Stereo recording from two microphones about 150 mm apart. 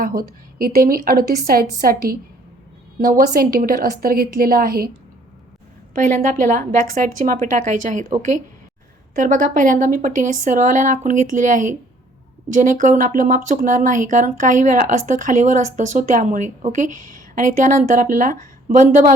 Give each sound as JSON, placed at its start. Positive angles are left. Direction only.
{"t": 0.0, "sound": "a woman's voice", "side_deg": -75}
{"t": 3.0, "sound": "a woman's voice", "side_deg": -65}
{"t": 5.9, "sound": "speech", "side_deg": -55}